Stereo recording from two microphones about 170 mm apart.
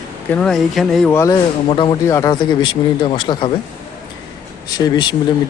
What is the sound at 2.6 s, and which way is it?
Speech, 30° left (ahead or behind).